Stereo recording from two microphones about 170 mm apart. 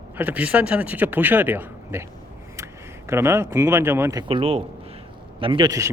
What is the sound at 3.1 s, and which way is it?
Speech, 15° right (ahead or behind).